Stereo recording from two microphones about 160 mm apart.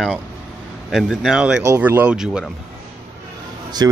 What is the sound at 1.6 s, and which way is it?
Speech, 15° right (ahead or behind).